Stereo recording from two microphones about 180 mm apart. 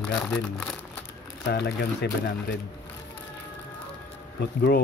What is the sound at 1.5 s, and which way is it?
Speech, 65° left (ahead or behind).